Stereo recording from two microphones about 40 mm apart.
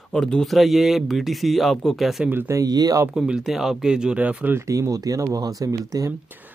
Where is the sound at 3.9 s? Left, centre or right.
Right.